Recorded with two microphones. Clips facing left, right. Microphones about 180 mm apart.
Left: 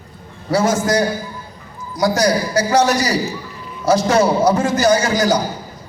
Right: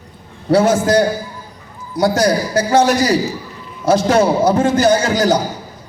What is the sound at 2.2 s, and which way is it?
A man's voice, 25° right (ahead or behind).